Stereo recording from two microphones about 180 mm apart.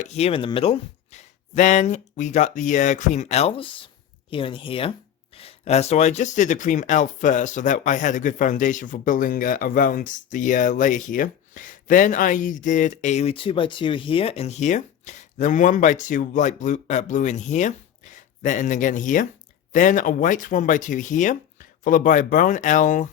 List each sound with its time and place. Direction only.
0.0 s speech: 35° left (ahead or behind)